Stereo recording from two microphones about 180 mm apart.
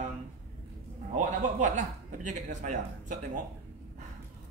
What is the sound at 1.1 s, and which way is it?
A man's voice, 45° right (ahead or behind).